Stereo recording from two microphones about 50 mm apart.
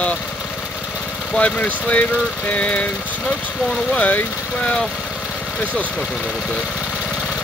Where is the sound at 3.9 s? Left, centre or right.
Left.